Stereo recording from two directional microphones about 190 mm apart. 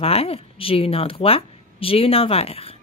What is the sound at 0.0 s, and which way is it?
A woman's voice, 30° left (ahead or behind).